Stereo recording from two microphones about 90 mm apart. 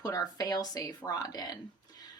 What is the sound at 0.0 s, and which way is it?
A woman's voice, 45° left (ahead or behind).